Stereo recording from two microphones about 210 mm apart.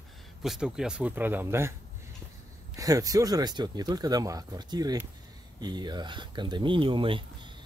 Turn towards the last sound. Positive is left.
turn(degrees=-25)  # may be behind; listen again after turning